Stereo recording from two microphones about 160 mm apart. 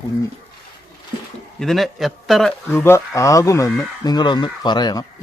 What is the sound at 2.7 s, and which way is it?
Speech, 15° left (ahead or behind).